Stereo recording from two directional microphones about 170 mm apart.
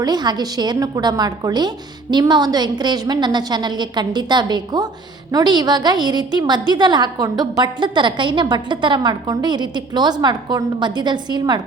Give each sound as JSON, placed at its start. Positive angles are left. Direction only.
{"t": 0.0, "sound": "a woman's voice", "side_deg": -25}